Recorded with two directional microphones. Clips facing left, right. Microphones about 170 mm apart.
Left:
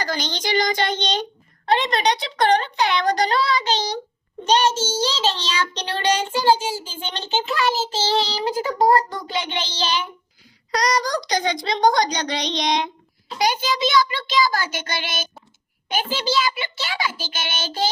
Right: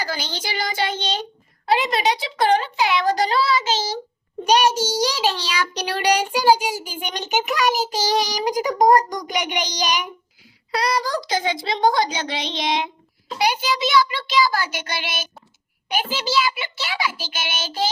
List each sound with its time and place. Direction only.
0.0 s a woman's voice: 5° right (ahead or behind)
10.7 s a woman's voice: 5° right (ahead or behind)